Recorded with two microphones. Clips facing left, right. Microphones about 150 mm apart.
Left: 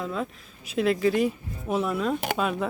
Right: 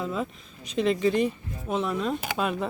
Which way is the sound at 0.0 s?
Centre (ahead or behind).